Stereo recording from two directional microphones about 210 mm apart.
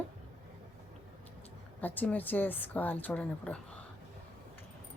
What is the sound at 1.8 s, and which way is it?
A woman's voice, 10° left (ahead or behind).